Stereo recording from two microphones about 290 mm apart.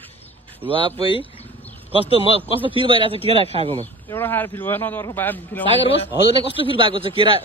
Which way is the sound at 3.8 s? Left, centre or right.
Centre.